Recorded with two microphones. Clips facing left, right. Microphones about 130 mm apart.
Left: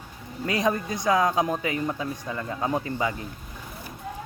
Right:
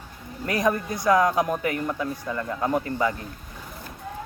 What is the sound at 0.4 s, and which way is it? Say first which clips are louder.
Speech: right 1 dB; 20° left (ahead or behind).